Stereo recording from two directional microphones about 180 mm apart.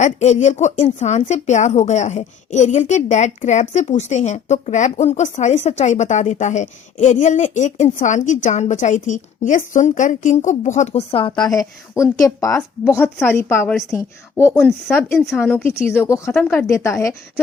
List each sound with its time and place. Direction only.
0.0 s a woman's voice: 40° left (ahead or behind); by 17.2 s 15° left (ahead or behind)